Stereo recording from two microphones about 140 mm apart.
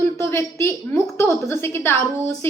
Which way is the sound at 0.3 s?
20° left (ahead or behind).